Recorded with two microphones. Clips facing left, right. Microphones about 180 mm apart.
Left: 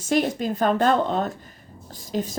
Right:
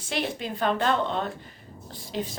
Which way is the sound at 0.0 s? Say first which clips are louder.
Left 8 dB; 45° left (ahead or behind).